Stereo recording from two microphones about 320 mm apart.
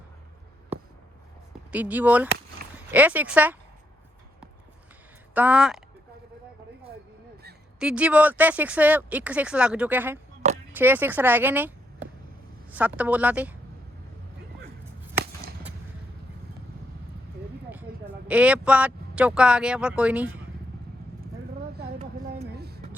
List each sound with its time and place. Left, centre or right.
1.7 s speech: centre
5.3 s speech: centre
7.8 s a woman's voice: centre
17.7 s speech: centre
21.8 s a sound: right